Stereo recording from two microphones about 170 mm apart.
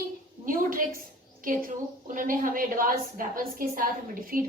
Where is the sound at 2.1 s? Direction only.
55° right (ahead or behind).